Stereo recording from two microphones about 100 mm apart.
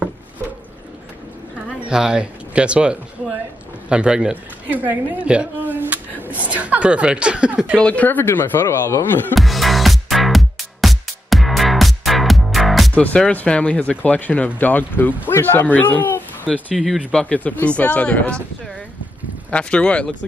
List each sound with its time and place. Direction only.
1.9 s a woman's voice: 10° right (ahead or behind)
7.8 s speech: 15° left (ahead or behind)
9.3 s music: centre (ahead or behind)
12.9 s speech: 10° left (ahead or behind)
16.7 s speech: centre (ahead or behind)
19.5 s speech: 10° left (ahead or behind)